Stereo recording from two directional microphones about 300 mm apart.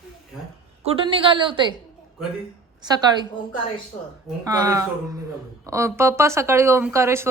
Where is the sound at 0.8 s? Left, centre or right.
Centre.